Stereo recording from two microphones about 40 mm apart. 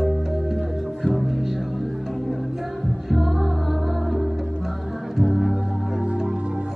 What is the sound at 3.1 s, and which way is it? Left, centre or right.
Music, centre.